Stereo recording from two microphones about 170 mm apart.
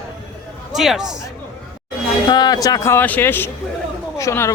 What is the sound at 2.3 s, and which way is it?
Speech, 25° left (ahead or behind).